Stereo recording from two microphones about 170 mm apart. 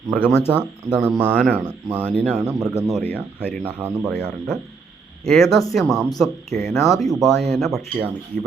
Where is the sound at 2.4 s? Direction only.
20° right (ahead or behind).